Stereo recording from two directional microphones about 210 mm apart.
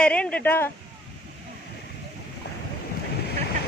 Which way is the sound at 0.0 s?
5° left (ahead or behind).